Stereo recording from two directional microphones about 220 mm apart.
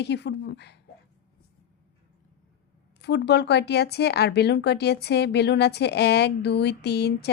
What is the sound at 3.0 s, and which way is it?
Speech, 50° left (ahead or behind).